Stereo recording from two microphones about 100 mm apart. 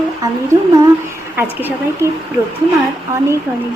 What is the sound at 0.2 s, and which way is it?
Humming, 35° right (ahead or behind).